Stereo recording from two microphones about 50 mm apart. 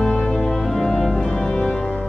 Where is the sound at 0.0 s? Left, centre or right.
Centre.